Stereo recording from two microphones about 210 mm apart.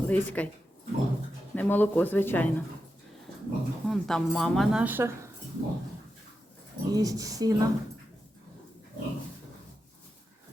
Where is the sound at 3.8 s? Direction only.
Centre (ahead or behind).